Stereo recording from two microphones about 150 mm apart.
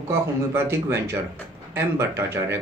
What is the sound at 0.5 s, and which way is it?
Speech, 15° right (ahead or behind).